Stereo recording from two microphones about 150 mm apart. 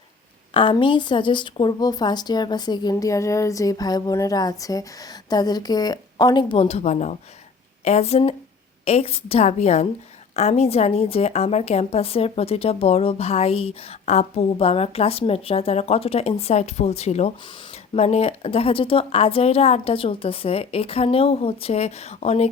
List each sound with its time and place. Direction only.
0.5 s a woman's voice: 35° left (ahead or behind)